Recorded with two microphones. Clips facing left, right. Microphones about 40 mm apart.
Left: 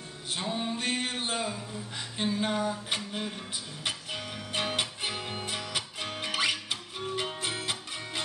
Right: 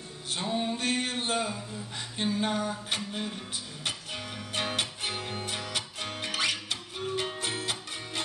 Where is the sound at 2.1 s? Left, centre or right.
Centre.